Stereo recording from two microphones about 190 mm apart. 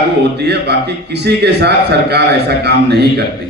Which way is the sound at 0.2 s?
60° right (ahead or behind).